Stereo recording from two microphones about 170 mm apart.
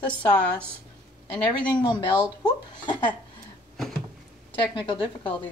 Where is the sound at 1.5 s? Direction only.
25° left (ahead or behind).